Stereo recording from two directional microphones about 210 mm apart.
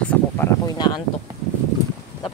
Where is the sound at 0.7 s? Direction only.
20° left (ahead or behind).